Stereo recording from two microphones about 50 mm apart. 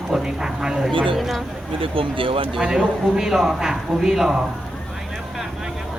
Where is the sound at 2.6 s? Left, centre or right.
Right.